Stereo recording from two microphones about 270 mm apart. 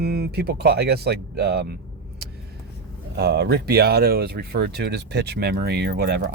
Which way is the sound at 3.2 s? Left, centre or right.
Right.